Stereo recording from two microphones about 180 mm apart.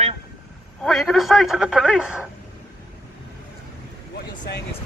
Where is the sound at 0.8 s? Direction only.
Centre (ahead or behind).